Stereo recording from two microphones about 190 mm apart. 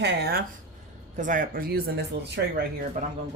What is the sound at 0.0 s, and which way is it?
Speech, 60° right (ahead or behind).